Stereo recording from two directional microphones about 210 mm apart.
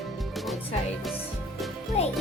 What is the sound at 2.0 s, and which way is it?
Music, 30° left (ahead or behind).